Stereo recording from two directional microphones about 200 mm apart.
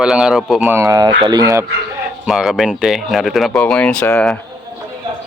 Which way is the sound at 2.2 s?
Centre (ahead or behind).